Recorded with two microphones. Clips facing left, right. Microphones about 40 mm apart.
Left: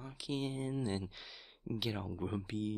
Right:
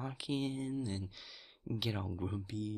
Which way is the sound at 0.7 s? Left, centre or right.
Left.